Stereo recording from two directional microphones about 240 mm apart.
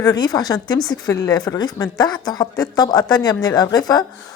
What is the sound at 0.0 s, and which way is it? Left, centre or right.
A woman's voice, centre.